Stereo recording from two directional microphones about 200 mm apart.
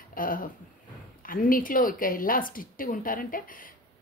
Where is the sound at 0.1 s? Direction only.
45° left (ahead or behind).